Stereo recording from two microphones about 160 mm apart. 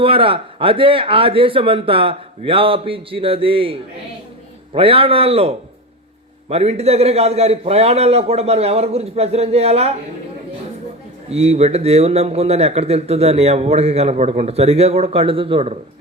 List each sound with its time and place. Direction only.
0.0 s speech: 35° right (ahead or behind)
11.3 s speech: 40° right (ahead or behind)